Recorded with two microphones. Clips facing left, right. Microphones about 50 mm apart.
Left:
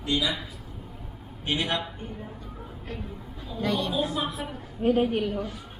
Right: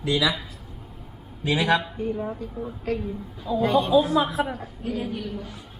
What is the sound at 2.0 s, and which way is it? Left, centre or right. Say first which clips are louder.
Speech: right 11 dB; right.